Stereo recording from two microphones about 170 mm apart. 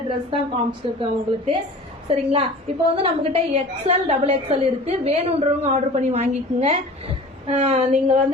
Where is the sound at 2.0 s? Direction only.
35° right (ahead or behind).